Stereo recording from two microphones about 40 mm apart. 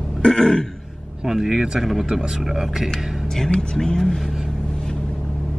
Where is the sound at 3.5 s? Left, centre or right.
Left.